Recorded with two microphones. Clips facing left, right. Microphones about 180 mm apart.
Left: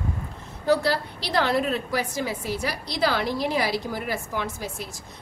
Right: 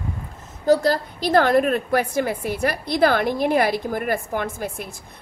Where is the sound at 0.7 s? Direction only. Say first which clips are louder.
Right 4 dB; 45° right (ahead or behind).